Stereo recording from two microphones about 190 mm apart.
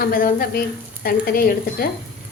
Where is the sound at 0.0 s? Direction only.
50° left (ahead or behind).